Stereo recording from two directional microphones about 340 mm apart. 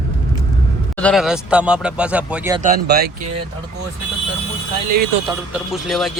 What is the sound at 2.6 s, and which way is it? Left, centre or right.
Speech, right.